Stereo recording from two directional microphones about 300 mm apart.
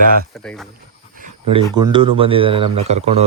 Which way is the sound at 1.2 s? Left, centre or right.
Centre.